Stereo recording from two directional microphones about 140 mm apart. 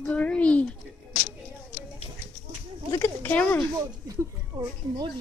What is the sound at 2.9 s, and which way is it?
Speech, 15° left (ahead or behind).